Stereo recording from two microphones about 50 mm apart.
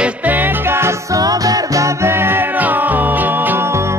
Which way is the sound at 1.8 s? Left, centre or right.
Right.